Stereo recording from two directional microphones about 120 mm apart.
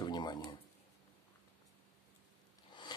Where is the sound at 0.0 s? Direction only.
35° left (ahead or behind).